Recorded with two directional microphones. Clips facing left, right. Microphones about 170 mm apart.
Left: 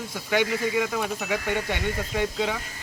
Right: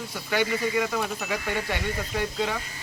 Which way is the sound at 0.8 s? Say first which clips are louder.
Left 1 dB; centre (ahead or behind).